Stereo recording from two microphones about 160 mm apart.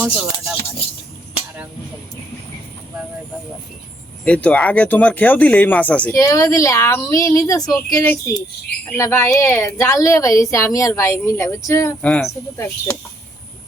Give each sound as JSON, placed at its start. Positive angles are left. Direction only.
{"t": 0.0, "sound": "speech", "side_deg": -5}
{"t": 4.2, "sound": "speech", "side_deg": 5}
{"t": 12.5, "sound": "speech", "side_deg": 20}